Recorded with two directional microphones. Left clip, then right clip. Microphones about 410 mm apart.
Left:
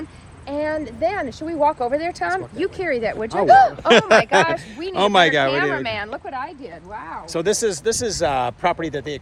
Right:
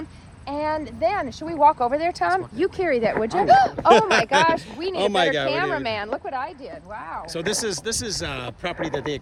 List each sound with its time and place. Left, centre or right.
0.4 s speech: centre
3.4 s speech: centre
4.1 s speech: centre
4.5 s speech: centre
4.9 s speech: centre
5.5 s speech: right
7.3 s speech: centre
8.8 s speech: centre